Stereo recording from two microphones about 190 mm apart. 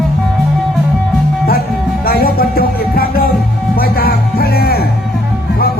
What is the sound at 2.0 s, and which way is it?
Music, 50° left (ahead or behind).